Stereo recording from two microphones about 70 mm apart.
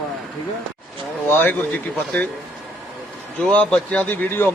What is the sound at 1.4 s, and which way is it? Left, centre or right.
Speech, left.